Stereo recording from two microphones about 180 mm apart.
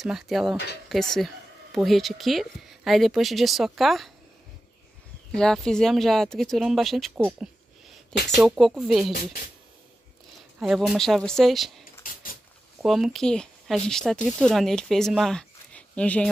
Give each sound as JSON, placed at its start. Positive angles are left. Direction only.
{"t": 0.0, "sound": "speech", "side_deg": 0}
{"t": 5.3, "sound": "speech", "side_deg": 5}
{"t": 8.4, "sound": "speech", "side_deg": 0}
{"t": 9.1, "sound": "speech", "side_deg": 55}
{"t": 10.6, "sound": "speech", "side_deg": 0}
{"t": 11.8, "sound": "a sound", "side_deg": 50}
{"t": 12.8, "sound": "speech", "side_deg": 0}